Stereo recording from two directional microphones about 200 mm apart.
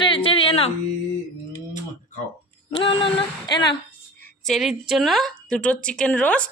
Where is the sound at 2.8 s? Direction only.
25° left (ahead or behind).